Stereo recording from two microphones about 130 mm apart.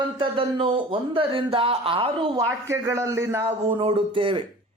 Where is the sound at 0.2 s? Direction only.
40° right (ahead or behind).